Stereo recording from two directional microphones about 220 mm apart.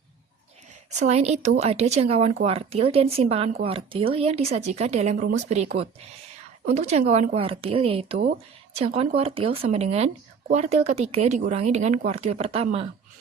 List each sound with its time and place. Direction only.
0.9 s speech: 30° right (ahead or behind)